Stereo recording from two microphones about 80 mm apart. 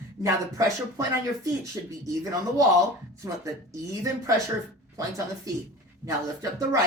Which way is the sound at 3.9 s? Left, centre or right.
Right.